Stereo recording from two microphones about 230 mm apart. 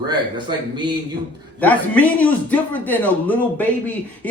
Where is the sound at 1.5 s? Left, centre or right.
Centre.